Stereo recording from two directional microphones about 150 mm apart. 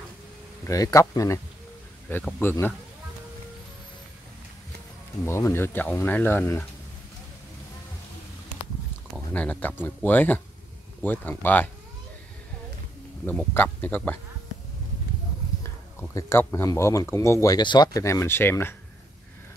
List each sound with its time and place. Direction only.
0.7 s speech: 20° left (ahead or behind)
5.2 s speech: 15° left (ahead or behind)
9.3 s speech: 10° left (ahead or behind)
13.2 s speech: 10° left (ahead or behind)
16.2 s speech: 15° left (ahead or behind)